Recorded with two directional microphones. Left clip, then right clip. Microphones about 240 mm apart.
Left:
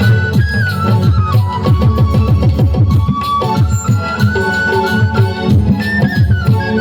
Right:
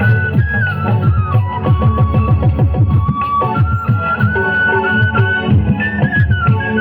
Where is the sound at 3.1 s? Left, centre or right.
Left.